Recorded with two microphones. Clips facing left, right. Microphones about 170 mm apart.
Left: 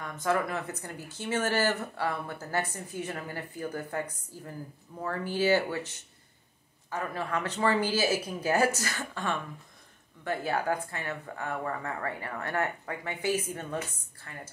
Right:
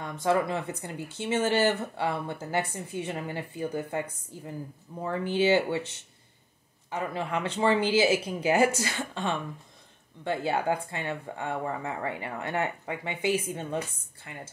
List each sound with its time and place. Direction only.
0.0 s speech: 25° right (ahead or behind)
6.9 s speech: 20° right (ahead or behind)